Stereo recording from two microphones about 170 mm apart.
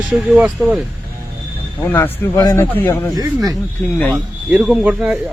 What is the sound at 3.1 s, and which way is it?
Speech, 20° right (ahead or behind).